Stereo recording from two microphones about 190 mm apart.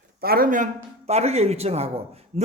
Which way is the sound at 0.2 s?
50° right (ahead or behind).